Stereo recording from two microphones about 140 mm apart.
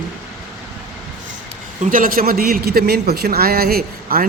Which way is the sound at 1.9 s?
85° right.